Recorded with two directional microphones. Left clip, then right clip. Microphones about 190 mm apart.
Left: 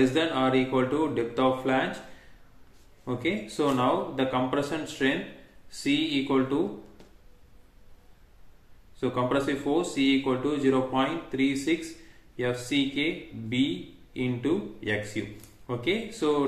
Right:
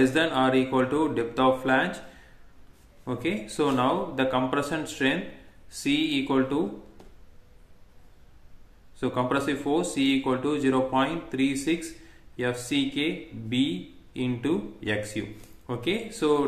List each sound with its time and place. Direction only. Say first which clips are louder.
0.0 s speech: right 2 dB; 35° right (ahead or behind)
3.1 s speech: even; 30° right (ahead or behind)
9.0 s speech: even; 35° right (ahead or behind)